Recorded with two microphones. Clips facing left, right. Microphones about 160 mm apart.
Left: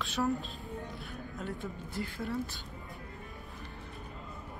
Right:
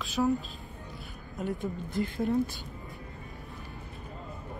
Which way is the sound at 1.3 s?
15° right (ahead or behind).